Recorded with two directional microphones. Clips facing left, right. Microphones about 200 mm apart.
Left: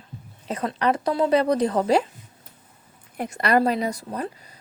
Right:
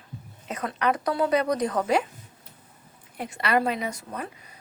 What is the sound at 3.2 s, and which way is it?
A woman's voice, 40° left (ahead or behind).